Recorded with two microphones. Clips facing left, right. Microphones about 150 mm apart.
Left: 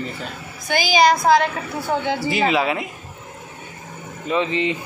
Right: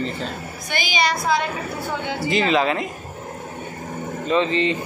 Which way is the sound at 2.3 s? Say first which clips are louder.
Right 2 dB; 10° left (ahead or behind).